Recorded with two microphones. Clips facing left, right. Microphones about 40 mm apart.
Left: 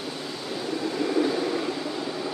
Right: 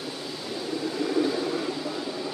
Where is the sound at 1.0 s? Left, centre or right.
Centre.